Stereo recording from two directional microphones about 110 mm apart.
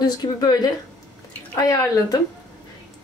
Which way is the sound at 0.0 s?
35° left (ahead or behind).